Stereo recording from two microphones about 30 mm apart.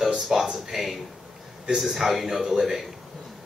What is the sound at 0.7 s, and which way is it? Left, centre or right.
Speech, centre.